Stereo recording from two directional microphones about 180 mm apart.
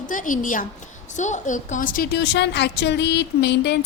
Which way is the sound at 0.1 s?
45° left (ahead or behind).